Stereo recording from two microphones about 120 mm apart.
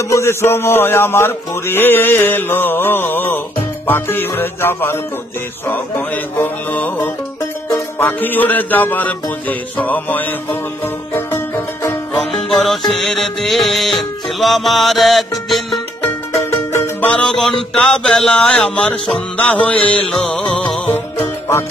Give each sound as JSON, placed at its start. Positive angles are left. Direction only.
{"t": 0.1, "sound": "music", "side_deg": 25}
{"t": 12.2, "sound": "music", "side_deg": 0}
{"t": 16.0, "sound": "music", "side_deg": 20}
{"t": 17.1, "sound": "music", "side_deg": 5}